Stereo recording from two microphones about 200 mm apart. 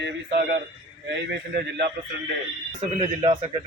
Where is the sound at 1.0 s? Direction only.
60° right (ahead or behind).